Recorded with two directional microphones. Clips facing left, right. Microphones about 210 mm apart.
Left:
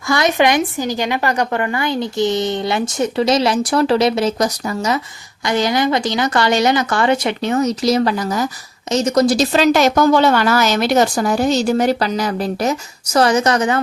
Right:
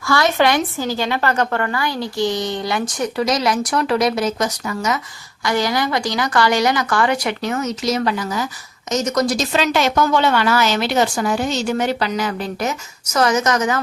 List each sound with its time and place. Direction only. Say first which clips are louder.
0.1 s a woman's voice: left 1 dB; 20° left (ahead or behind); by 8.4 s 40° left (ahead or behind)
8.9 s a woman's voice: left 4 dB; 30° left (ahead or behind)